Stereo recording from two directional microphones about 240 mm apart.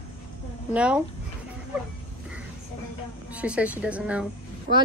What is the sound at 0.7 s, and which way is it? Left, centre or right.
Speech, centre.